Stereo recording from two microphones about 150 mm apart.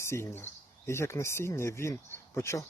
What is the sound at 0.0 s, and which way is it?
Speech, 20° left (ahead or behind).